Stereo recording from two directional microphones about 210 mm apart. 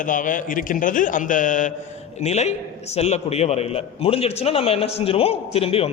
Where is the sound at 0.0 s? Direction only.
40° left (ahead or behind).